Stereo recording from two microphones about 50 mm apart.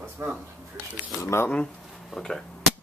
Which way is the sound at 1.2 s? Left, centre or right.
Left.